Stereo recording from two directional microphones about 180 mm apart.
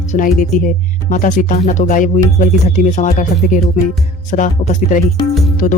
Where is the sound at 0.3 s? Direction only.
50° left (ahead or behind).